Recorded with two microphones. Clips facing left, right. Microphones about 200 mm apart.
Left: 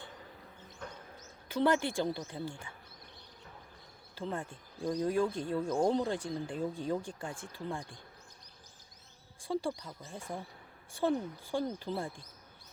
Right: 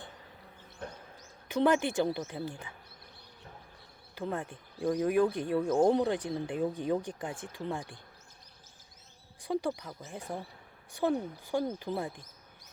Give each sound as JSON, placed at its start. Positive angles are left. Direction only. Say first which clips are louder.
{"t": 1.5, "sound": "speech", "louder": "right 3 dB", "side_deg": -20}
{"t": 4.1, "sound": "speech", "louder": "right 3 dB", "side_deg": -15}
{"t": 9.4, "sound": "speech", "louder": "right 2 dB", "side_deg": -20}